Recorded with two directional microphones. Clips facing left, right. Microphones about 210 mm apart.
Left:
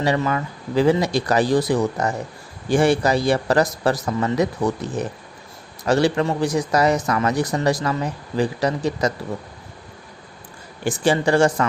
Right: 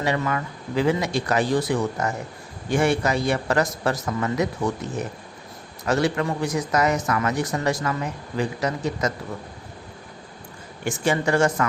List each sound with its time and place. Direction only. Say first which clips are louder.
0.0 s a man's voice: left 3 dB; 35° left (ahead or behind)
5.8 s a man's voice: left 4 dB; 30° left (ahead or behind)
10.8 s a man's voice: left 4 dB; 30° left (ahead or behind)